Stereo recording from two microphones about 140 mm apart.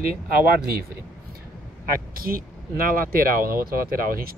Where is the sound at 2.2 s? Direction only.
90° right.